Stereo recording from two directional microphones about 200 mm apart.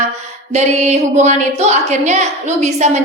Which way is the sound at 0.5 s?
35° right (ahead or behind).